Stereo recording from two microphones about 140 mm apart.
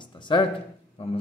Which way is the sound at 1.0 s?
45° left (ahead or behind).